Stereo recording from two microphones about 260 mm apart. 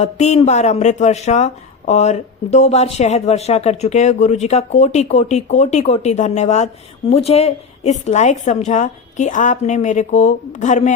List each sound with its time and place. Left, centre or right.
0.0 s speech: left